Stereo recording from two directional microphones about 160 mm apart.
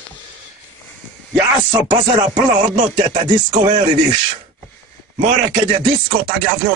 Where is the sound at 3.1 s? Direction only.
25° right (ahead or behind).